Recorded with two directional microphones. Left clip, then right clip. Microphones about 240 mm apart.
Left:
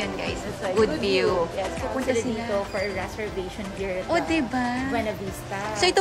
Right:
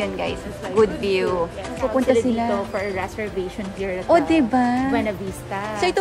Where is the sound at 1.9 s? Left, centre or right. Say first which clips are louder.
Right 8 dB; centre.